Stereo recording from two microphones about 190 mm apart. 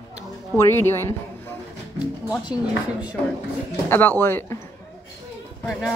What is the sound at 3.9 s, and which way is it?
Speech, 10° left (ahead or behind).